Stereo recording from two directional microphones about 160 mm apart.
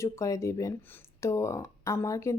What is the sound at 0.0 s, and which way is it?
A woman's voice, 20° left (ahead or behind).